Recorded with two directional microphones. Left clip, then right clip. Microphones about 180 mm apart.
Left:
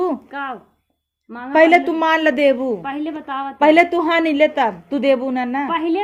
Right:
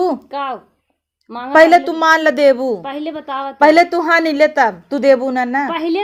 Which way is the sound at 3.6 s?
20° right (ahead or behind).